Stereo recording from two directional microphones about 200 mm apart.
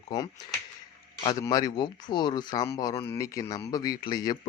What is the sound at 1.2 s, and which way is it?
A man's voice, 20° left (ahead or behind).